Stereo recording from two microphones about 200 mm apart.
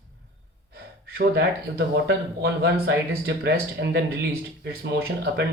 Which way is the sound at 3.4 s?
60° right (ahead or behind).